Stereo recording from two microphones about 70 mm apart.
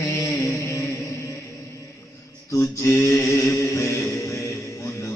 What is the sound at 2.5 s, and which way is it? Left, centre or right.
Mantra, left.